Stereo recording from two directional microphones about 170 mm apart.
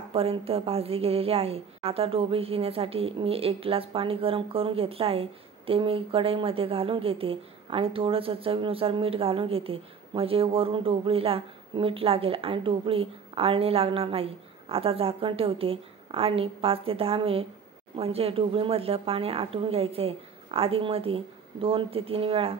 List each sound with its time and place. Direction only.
0.1 s a woman's voice: 35° right (ahead or behind)